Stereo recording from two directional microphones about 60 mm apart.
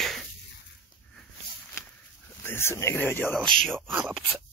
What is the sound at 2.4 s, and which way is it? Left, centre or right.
Speech, left.